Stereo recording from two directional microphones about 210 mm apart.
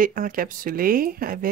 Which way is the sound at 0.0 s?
40° right (ahead or behind).